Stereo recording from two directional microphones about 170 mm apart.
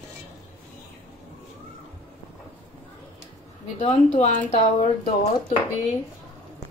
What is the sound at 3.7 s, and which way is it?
Speech, 40° left (ahead or behind).